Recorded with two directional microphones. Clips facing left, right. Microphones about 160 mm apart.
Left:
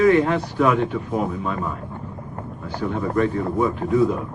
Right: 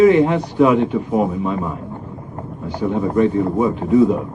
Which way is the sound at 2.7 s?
15° right (ahead or behind).